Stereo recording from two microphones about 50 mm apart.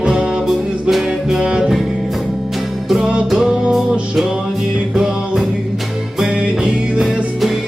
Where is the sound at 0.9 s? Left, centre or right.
Centre.